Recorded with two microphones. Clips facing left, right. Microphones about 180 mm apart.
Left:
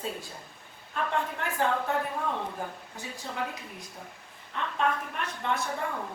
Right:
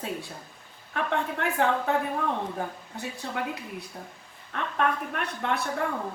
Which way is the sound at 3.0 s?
65° right (ahead or behind).